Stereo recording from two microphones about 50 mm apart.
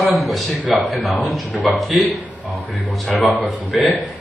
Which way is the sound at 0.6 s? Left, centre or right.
Right.